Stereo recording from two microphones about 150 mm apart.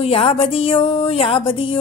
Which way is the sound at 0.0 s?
40° left (ahead or behind).